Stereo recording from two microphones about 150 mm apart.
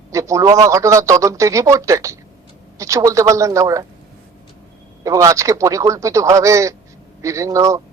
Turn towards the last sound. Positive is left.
turn(degrees=-20)  # may be behind; listen again after turning